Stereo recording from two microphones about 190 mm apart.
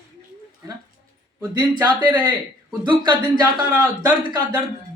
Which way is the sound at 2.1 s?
20° right (ahead or behind).